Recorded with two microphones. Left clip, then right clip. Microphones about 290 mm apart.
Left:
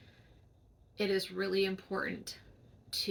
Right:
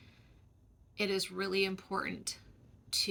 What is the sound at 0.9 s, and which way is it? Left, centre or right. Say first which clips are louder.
Speech: left 1 dB; right.